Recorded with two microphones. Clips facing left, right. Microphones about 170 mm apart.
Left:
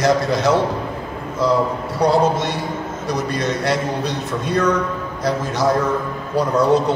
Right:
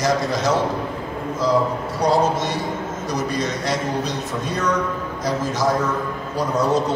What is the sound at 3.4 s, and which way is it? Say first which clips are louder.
A man's voice: left 3 dB; 60° left (ahead or behind).